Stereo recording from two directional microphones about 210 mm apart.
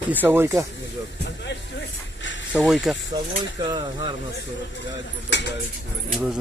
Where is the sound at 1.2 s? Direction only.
55° left (ahead or behind).